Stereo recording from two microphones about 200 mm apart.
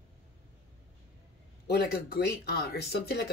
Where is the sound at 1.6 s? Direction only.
50° left (ahead or behind).